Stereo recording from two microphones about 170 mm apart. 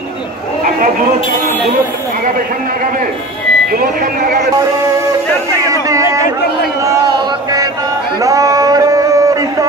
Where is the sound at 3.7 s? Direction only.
60° right (ahead or behind).